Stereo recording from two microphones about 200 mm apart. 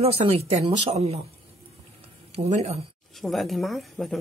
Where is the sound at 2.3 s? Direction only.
30° right (ahead or behind).